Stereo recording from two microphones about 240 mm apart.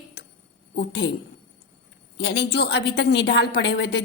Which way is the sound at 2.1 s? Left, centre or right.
Left.